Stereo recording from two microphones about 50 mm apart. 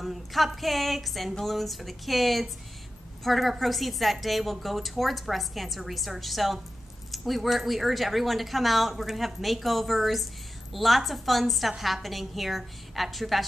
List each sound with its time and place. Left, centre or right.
0.0 s a woman's voice: centre